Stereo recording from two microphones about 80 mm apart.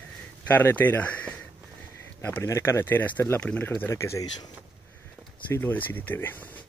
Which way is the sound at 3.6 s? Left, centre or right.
Left.